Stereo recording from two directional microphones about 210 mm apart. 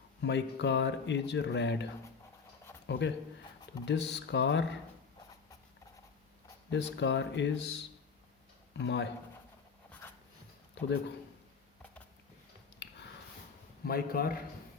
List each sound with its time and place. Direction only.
0.2 s speech: 55° left (ahead or behind)
6.7 s speech: 55° left (ahead or behind)
8.8 s speech: 55° left (ahead or behind)
10.8 s a man's voice: 55° left (ahead or behind)
12.8 s a sound: 55° left (ahead or behind)
13.8 s a man's voice: 45° left (ahead or behind)